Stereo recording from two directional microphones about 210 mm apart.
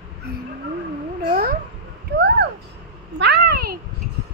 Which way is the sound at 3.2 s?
50° right (ahead or behind).